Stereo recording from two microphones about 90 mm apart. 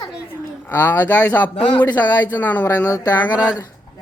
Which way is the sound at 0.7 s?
25° left (ahead or behind).